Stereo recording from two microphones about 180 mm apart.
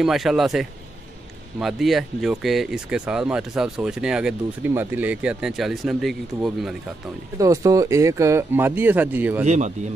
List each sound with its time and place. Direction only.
0.0 s speech: centre (ahead or behind)
7.3 s speech: 20° right (ahead or behind)
9.4 s speech: 40° right (ahead or behind)